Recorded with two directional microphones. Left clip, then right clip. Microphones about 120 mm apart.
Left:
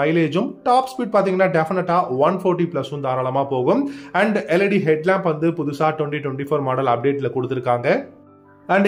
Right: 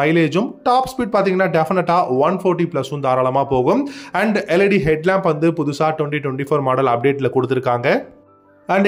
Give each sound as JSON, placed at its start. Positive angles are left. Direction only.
{"t": 0.0, "sound": "speech", "side_deg": -25}